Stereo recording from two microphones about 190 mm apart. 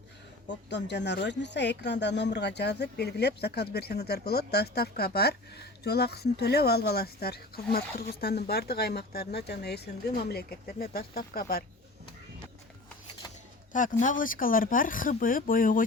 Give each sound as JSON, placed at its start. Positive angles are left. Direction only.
{"t": 0.4, "sound": "speech", "side_deg": 65}
{"t": 14.0, "sound": "speech", "side_deg": 45}